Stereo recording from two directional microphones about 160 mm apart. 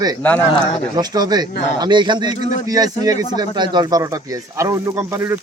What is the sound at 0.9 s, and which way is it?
Speech, 25° right (ahead or behind).